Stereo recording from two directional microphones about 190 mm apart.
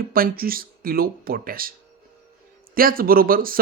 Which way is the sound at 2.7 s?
50° right (ahead or behind).